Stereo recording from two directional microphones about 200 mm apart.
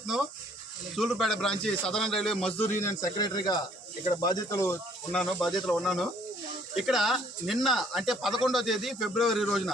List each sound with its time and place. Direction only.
0.9 s speech: centre (ahead or behind)
2.7 s speech: 15° left (ahead or behind)
5.1 s speech: centre (ahead or behind)